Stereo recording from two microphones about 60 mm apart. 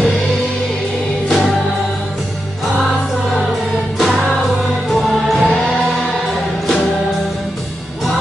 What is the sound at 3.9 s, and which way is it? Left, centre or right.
Music, centre.